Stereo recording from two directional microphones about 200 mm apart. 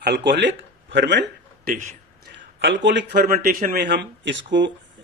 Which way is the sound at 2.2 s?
60° right (ahead or behind).